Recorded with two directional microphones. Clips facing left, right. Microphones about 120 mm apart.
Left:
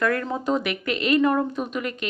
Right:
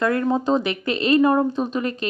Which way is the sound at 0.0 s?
25° right (ahead or behind).